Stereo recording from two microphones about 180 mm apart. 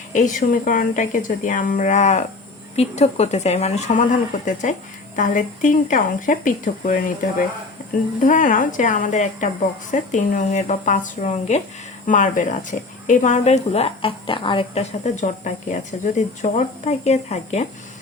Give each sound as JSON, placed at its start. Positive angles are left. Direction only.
{"t": 0.1, "sound": "a woman's voice", "side_deg": 45}
{"t": 8.2, "sound": "a woman's voice", "side_deg": 45}